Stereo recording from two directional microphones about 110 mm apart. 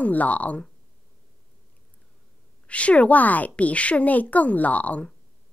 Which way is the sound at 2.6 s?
10° left (ahead or behind).